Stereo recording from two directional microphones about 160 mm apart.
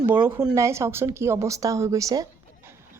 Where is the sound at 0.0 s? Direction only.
15° right (ahead or behind).